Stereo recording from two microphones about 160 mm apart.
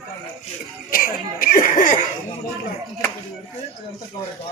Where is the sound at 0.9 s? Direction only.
65° left (ahead or behind).